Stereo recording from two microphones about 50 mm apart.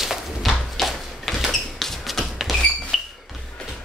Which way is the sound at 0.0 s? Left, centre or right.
Centre.